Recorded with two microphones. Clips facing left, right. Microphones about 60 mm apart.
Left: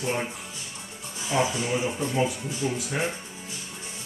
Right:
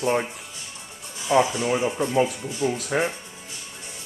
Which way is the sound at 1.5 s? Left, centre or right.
Right.